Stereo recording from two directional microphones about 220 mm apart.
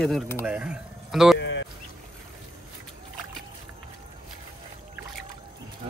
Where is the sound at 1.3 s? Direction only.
55° left (ahead or behind).